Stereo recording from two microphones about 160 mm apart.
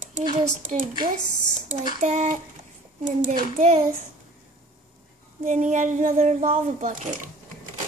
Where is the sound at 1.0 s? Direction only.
45° right (ahead or behind).